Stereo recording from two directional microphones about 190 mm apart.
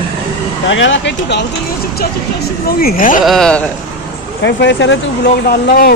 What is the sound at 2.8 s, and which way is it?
Speech, 45° left (ahead or behind).